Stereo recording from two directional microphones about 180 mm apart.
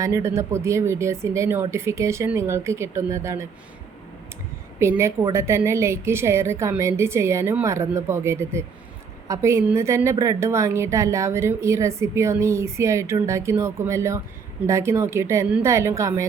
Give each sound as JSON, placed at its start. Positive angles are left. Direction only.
{"t": 0.0, "sound": "a woman's voice", "side_deg": -15}
{"t": 4.8, "sound": "a woman's voice", "side_deg": -15}